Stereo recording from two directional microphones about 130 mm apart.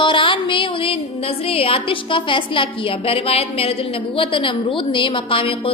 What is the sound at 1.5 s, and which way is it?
A woman's voice, 45° left (ahead or behind).